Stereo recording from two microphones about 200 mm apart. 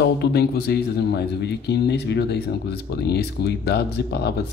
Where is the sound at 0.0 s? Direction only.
55° left (ahead or behind).